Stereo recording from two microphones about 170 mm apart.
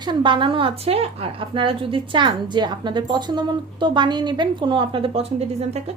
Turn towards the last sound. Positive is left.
turn(degrees=-35)  # may be behind; listen again after turning